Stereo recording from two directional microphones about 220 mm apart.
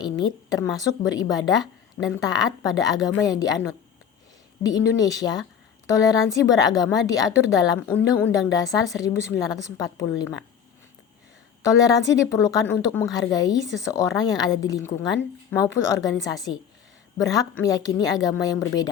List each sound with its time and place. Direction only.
0.0 s a woman's voice: 20° left (ahead or behind)
11.8 s a woman's voice: 15° left (ahead or behind)